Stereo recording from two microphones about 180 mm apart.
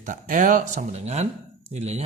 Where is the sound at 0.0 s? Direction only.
45° right (ahead or behind).